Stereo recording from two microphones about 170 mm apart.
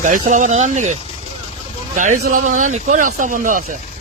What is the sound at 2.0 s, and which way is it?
Speech, 50° right (ahead or behind).